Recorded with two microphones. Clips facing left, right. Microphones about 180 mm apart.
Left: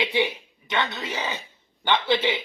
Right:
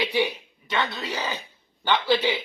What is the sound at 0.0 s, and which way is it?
A man's voice, 25° left (ahead or behind).